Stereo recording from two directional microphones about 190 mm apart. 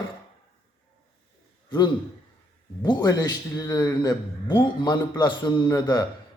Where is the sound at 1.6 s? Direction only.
20° left (ahead or behind).